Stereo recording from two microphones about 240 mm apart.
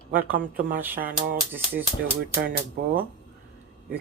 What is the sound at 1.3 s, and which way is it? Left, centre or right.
Speech, centre.